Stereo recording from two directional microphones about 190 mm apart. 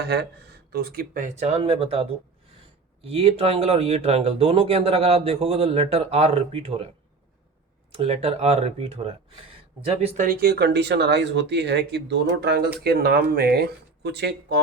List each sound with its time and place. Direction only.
0.1 s speech: 60° right (ahead or behind); by 6.8 s 30° right (ahead or behind)
7.9 s speech: 35° right (ahead or behind)
10.2 s speech: 60° right (ahead or behind)